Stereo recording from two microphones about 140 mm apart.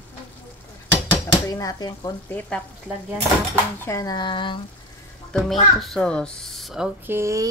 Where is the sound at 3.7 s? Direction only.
20° left (ahead or behind); by 4.6 s 35° left (ahead or behind).